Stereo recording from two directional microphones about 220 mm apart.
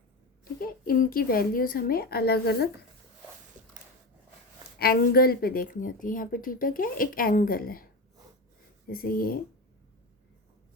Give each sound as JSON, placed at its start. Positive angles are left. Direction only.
{"t": 0.4, "sound": "a woman's voice", "side_deg": 40}
{"t": 4.8, "sound": "a woman's voice", "side_deg": 45}
{"t": 8.9, "sound": "a woman's voice", "side_deg": 40}